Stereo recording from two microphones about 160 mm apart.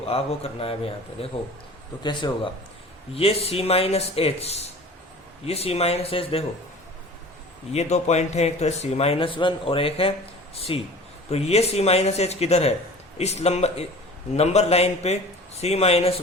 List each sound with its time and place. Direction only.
0.0 s speech: 40° left (ahead or behind)
7.7 s speech: 45° left (ahead or behind)